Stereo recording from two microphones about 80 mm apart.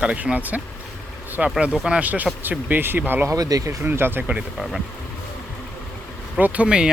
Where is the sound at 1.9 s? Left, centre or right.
Centre.